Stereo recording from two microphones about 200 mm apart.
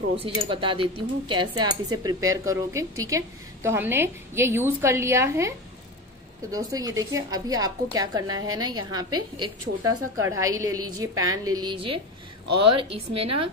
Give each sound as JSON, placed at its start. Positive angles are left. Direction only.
{"t": 0.2, "sound": "speech", "side_deg": -25}
{"t": 6.5, "sound": "speech", "side_deg": -15}